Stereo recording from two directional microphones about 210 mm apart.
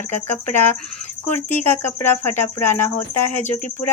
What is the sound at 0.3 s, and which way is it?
Speech, 10° left (ahead or behind).